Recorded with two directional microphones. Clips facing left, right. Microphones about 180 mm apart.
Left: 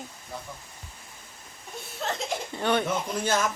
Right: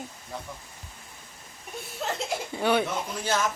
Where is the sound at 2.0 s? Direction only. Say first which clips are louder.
Even; 5° right (ahead or behind).